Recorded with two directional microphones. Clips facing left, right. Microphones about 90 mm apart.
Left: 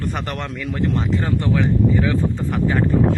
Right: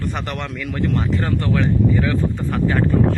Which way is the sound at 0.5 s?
25° left (ahead or behind).